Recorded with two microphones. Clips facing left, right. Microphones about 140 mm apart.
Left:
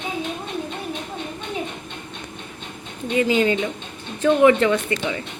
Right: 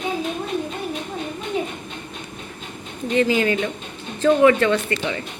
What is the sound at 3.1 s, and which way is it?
A woman's voice, 15° left (ahead or behind).